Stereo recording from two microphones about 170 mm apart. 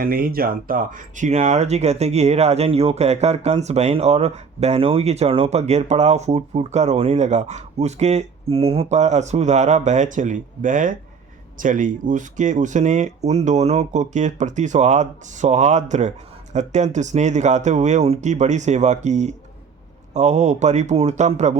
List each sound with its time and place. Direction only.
0.0 s speech: 60° right (ahead or behind); by 21.6 s 45° right (ahead or behind)